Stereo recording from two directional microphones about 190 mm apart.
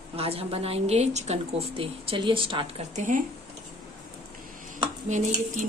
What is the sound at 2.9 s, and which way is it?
Speech, 40° right (ahead or behind).